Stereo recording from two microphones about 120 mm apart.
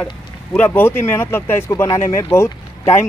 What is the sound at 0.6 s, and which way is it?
Speech, 15° left (ahead or behind).